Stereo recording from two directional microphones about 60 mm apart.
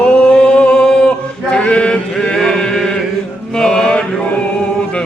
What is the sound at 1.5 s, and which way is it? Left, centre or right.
Chant, centre.